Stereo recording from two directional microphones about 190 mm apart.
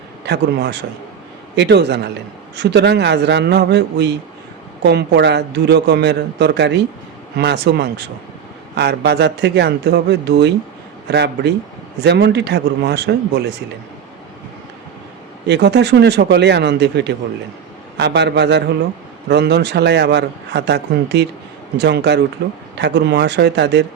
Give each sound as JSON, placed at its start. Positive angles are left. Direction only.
{"t": 0.3, "sound": "a man's voice", "side_deg": -60}
{"t": 15.4, "sound": "a man's voice", "side_deg": -65}